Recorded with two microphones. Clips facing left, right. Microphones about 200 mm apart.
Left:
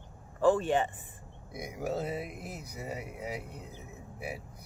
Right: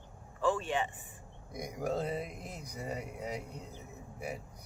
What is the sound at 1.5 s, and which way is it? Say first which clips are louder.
Speech: even; 5° left (ahead or behind).